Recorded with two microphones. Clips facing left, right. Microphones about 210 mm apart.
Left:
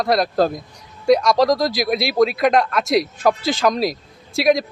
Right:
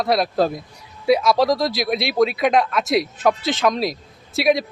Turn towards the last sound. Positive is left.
turn(degrees=0)  # may be behind; listen again after turning